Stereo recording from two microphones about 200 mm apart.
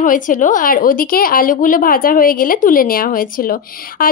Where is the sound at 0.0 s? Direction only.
40° left (ahead or behind).